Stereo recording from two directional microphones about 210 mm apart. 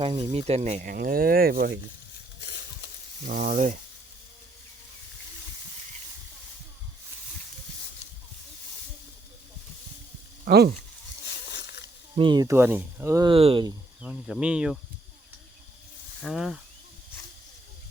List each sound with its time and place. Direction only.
0.0 s speech: 25° right (ahead or behind); by 1.7 s 45° right (ahead or behind)
3.2 s speech: 40° right (ahead or behind)
10.4 s speech: 45° right (ahead or behind)
11.5 s snake: 55° left (ahead or behind)
12.1 s speech: 20° right (ahead or behind)
14.0 s speech: 5° right (ahead or behind)
16.2 s speech: centre (ahead or behind)